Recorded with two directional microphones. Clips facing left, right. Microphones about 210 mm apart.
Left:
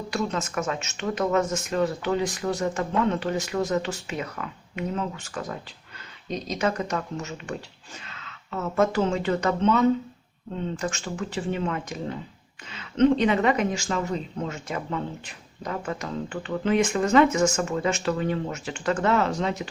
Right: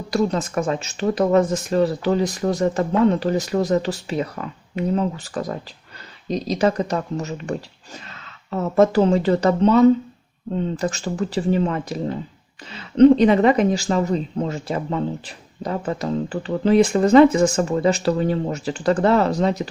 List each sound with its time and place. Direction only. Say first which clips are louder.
0.1 s speech: right 8 dB; 35° right (ahead or behind)